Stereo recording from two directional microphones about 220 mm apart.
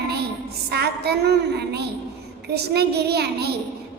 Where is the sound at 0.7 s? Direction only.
45° right (ahead or behind).